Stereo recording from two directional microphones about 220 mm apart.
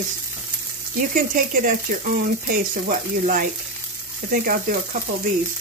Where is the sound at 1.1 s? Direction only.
40° right (ahead or behind).